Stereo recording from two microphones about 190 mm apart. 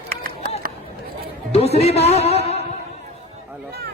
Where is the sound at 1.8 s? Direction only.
35° left (ahead or behind).